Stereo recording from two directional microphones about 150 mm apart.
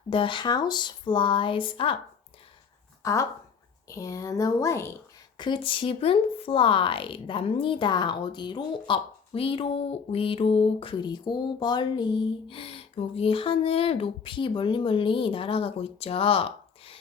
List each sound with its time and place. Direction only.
0.1 s speech: 35° left (ahead or behind)
3.0 s speech: 20° left (ahead or behind)
5.4 s speech: 35° left (ahead or behind)